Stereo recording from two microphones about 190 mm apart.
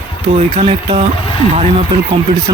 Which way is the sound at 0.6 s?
30° right (ahead or behind).